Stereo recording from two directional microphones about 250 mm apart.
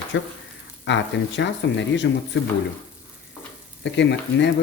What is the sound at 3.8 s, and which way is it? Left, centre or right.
Speech, left.